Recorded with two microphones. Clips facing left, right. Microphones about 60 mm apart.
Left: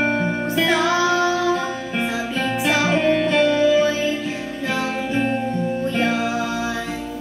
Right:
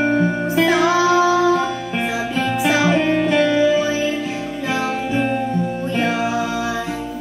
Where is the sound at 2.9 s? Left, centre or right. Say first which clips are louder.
Right 1 dB; right.